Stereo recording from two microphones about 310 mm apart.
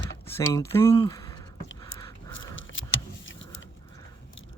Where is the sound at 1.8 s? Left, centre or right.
Centre.